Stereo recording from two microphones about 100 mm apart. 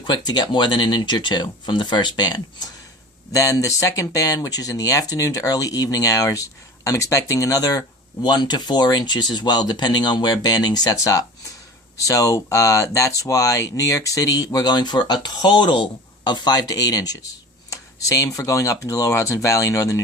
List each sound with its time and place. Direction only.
0.1 s speech: 45° left (ahead or behind)
3.3 s speech: 35° left (ahead or behind)